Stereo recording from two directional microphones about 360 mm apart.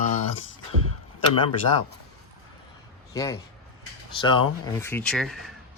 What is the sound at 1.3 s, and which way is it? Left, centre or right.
Speech, centre.